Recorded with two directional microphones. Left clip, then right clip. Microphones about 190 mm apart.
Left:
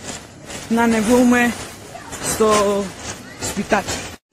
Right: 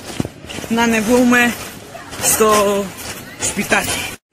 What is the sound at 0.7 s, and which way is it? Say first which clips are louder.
Speech: right 2 dB; 15° left (ahead or behind).